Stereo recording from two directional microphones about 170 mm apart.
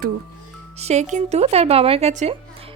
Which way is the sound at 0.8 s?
40° right (ahead or behind).